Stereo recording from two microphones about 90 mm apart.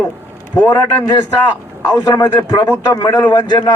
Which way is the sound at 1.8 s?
45° left (ahead or behind).